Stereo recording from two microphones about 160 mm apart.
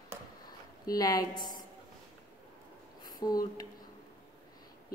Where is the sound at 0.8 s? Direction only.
25° left (ahead or behind).